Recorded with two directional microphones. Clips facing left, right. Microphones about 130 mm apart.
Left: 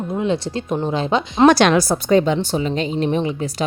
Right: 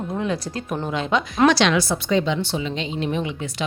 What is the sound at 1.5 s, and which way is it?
Speech, 50° left (ahead or behind).